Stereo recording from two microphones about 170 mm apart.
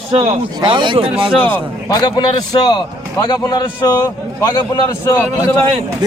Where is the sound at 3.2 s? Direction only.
25° left (ahead or behind).